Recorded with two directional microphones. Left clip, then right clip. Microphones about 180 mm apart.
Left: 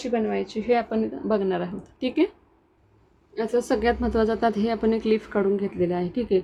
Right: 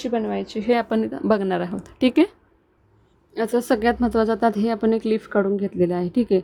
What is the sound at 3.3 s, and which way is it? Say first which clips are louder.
Speech: right 3 dB; 45° right (ahead or behind).